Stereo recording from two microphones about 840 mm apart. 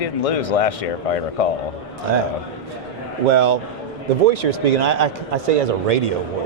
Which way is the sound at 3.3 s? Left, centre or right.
Right.